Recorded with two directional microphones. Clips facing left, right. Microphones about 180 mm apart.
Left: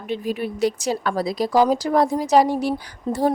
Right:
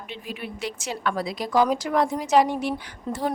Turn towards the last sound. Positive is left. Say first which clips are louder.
# left 7 dB
turn(degrees=40)  # may be behind; listen again after turning